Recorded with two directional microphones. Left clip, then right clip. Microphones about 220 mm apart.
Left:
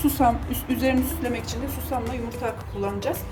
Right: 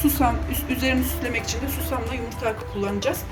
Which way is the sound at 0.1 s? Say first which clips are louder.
Left 1 dB; 45° left (ahead or behind).